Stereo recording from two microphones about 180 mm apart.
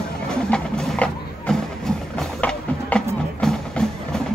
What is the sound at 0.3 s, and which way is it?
Music, 5° left (ahead or behind).